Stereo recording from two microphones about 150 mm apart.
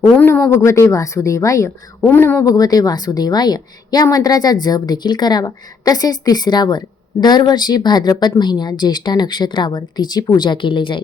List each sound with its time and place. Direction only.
0.2 s speech: 15° left (ahead or behind); by 11.0 s 35° left (ahead or behind)